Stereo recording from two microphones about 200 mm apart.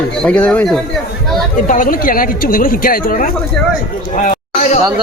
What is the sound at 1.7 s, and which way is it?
Speech, 40° left (ahead or behind).